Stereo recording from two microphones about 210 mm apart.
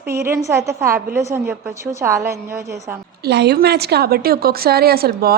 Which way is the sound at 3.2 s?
50° right (ahead or behind).